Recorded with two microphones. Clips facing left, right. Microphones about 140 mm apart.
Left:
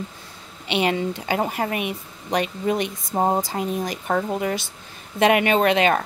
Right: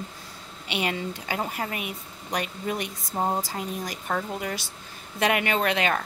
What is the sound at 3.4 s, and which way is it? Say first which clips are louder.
A woman's voice: left 6 dB; 20° left (ahead or behind).